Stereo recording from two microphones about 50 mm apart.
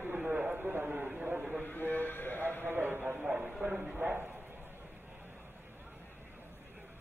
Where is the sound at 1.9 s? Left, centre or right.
Left.